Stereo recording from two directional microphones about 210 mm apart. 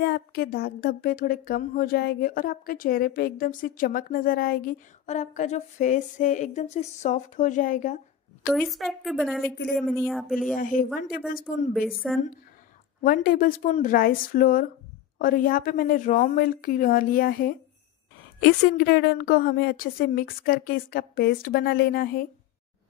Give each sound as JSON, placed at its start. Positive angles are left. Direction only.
{"t": 0.0, "sound": "speech", "side_deg": 50}
{"t": 8.5, "sound": "speech", "side_deg": 0}
{"t": 10.5, "sound": "speech", "side_deg": 40}
{"t": 11.9, "sound": "speech", "side_deg": 0}
{"t": 13.0, "sound": "a woman's voice", "side_deg": 40}